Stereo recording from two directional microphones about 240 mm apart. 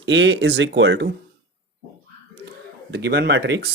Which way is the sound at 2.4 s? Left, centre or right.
Right.